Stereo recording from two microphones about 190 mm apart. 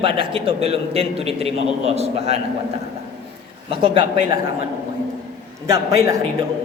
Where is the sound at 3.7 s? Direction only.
25° right (ahead or behind).